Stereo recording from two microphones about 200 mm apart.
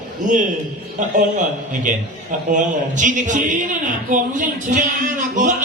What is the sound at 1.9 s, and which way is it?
Speech, 40° right (ahead or behind).